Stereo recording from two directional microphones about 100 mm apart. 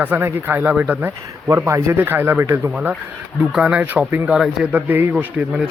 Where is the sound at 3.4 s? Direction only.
5° right (ahead or behind).